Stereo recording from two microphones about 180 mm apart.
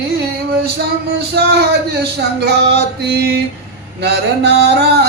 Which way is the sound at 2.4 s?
65° right (ahead or behind).